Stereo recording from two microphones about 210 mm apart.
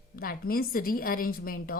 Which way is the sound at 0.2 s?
45° left (ahead or behind).